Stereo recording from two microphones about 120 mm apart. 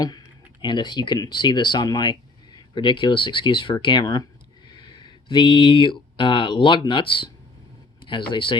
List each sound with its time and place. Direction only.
0.6 s speech: 40° left (ahead or behind)